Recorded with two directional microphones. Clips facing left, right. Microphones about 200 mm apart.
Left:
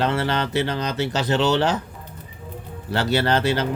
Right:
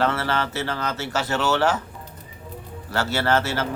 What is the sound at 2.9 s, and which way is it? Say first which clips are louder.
Speech: left 2 dB; 20° left (ahead or behind).